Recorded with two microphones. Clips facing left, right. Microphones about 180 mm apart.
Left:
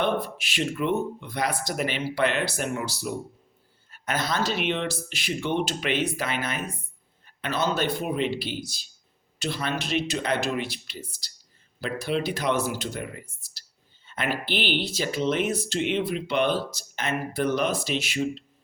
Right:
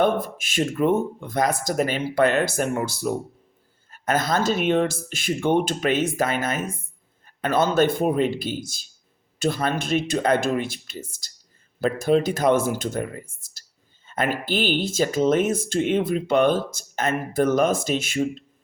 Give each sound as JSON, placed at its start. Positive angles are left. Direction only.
{"t": 0.0, "sound": "speech", "side_deg": -45}